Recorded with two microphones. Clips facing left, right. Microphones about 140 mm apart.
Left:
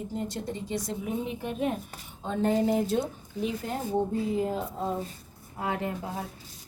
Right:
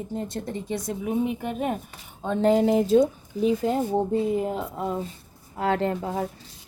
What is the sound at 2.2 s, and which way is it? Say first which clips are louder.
Speech: right 5 dB; 75° right (ahead or behind).